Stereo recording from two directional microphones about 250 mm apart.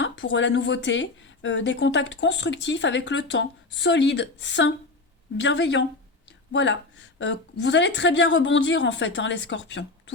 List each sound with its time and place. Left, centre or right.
0.0 s speech: left